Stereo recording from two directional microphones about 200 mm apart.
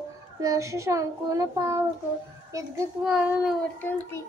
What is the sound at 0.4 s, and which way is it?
A child's voice, 15° right (ahead or behind).